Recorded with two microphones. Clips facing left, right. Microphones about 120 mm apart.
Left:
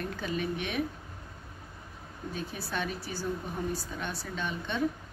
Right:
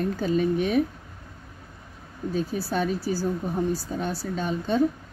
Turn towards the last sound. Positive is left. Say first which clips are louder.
# right 9 dB
turn(degrees=-35)  # may be behind; listen again after turning